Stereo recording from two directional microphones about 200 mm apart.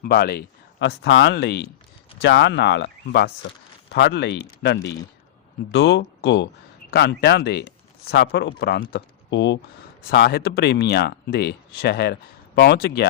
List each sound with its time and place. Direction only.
0.0 s speech: 50° left (ahead or behind)
10.0 s speech: 50° left (ahead or behind)